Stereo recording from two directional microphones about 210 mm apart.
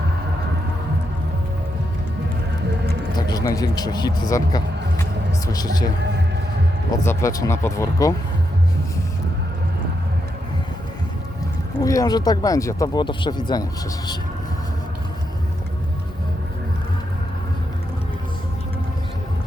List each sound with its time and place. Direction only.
3.2 s speech: 20° left (ahead or behind)
6.9 s speech: 15° left (ahead or behind)
11.8 s speech: 15° left (ahead or behind)